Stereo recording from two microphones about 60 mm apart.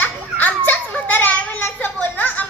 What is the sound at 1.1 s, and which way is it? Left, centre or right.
Children playing, left.